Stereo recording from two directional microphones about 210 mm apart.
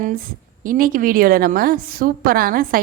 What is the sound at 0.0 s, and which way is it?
A woman's voice, 40° right (ahead or behind).